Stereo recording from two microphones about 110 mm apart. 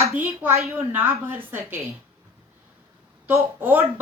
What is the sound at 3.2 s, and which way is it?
Speech, 20° right (ahead or behind).